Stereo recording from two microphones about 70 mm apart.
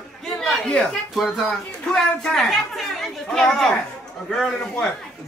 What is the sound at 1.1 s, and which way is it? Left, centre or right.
A woman's voice, centre.